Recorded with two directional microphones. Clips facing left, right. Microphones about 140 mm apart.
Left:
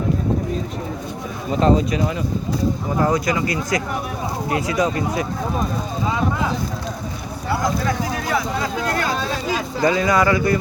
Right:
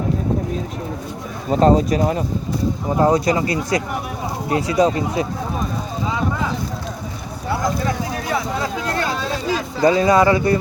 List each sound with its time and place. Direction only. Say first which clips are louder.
1.5 s speech: right 3 dB; 40° right (ahead or behind); by 5.2 s 25° right (ahead or behind)
7.9 s a sound: even; 25° right (ahead or behind)
9.8 s speech: right 4 dB; 30° right (ahead or behind)